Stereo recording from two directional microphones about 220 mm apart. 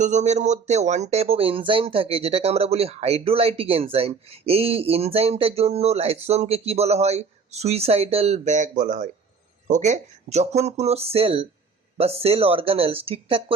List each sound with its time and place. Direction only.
0.0 s speech: 35° right (ahead or behind)